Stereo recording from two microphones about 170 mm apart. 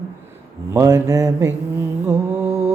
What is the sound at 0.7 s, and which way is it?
Mantra, 15° right (ahead or behind).